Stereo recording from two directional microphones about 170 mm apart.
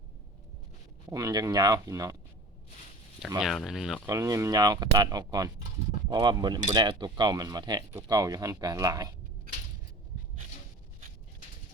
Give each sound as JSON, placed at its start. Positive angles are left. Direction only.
{"t": 1.1, "sound": "speech", "side_deg": -20}
{"t": 3.2, "sound": "speech", "side_deg": -5}
{"t": 4.0, "sound": "speech", "side_deg": -20}